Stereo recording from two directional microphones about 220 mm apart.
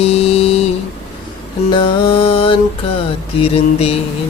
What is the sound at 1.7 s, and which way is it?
Music, 25° left (ahead or behind).